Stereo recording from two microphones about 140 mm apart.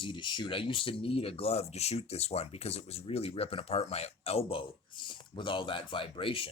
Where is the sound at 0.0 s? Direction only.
35° left (ahead or behind).